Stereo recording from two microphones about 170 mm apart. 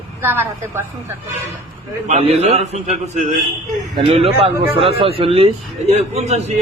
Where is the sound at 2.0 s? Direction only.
40° right (ahead or behind).